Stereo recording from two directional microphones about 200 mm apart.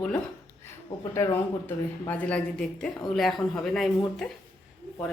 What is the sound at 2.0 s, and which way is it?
Speech, 10° left (ahead or behind).